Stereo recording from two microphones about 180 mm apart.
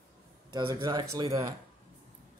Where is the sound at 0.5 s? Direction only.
20° right (ahead or behind).